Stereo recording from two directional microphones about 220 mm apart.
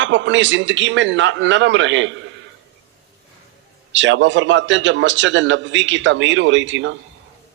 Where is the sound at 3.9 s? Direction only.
55° right (ahead or behind).